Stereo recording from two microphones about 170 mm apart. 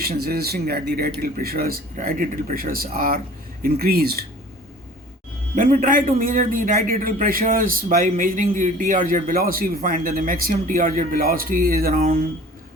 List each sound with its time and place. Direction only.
0.0 s a man's voice: 65° right (ahead or behind)
5.5 s a man's voice: 55° right (ahead or behind)